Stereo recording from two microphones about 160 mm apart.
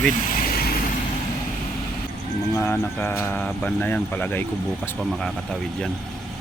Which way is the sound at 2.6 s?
15° left (ahead or behind).